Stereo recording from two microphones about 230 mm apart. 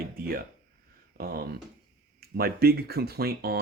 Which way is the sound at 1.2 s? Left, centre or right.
Right.